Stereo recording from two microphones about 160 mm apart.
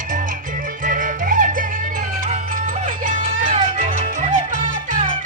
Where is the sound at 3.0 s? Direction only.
55° right (ahead or behind).